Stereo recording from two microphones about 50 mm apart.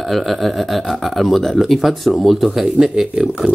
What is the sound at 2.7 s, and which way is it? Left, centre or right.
Speech, centre.